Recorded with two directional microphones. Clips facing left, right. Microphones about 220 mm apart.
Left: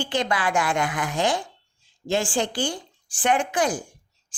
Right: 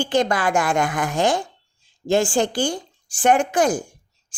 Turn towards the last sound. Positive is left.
turn(degrees=-45)  # may be behind; listen again after turning